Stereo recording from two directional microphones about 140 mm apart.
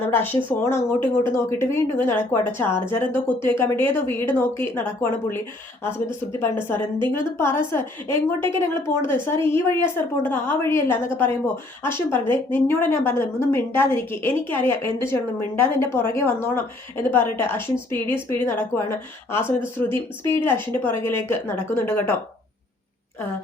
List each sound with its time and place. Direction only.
0.1 s a woman's voice: 15° left (ahead or behind)
6.4 s a woman's voice: 15° left (ahead or behind)